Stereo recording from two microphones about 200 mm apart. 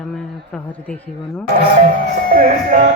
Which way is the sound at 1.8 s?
45° right (ahead or behind).